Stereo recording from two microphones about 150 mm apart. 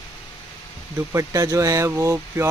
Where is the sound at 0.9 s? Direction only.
20° right (ahead or behind).